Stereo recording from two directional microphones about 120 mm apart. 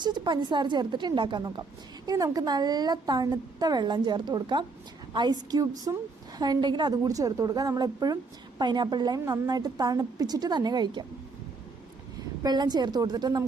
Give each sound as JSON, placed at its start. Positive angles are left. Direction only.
{"t": 0.0, "sound": "a woman's voice", "side_deg": -40}
{"t": 12.4, "sound": "a woman's voice", "side_deg": -35}